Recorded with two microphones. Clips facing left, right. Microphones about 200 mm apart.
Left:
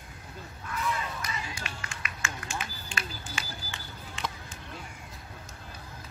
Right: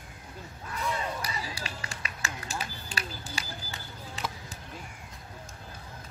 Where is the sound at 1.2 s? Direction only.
35° right (ahead or behind).